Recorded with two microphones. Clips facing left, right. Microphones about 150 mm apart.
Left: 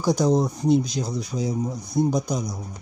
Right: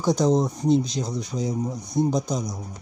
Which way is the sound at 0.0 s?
5° left (ahead or behind).